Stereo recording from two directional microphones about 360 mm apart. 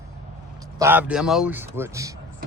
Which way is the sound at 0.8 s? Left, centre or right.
Centre.